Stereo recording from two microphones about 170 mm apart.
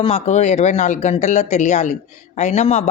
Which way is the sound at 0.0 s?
40° left (ahead or behind).